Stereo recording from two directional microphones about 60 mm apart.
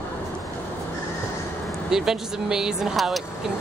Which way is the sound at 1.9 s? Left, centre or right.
Centre.